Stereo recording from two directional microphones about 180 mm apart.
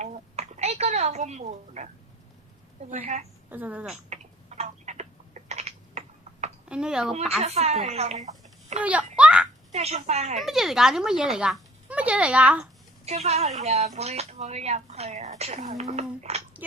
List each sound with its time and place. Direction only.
0.0 s a sound: 40° right (ahead or behind)
3.5 s speech: 10° right (ahead or behind)
4.1 s a sound: 40° right (ahead or behind)
6.7 s speech: 5° right (ahead or behind)
7.1 s speech: 35° right (ahead or behind)
8.8 s speech: 5° right (ahead or behind)
9.1 s a sound: 5° right (ahead or behind)
9.7 s speech: 35° right (ahead or behind)
10.4 s speech: centre (ahead or behind)
13.1 s speech: 35° right (ahead or behind)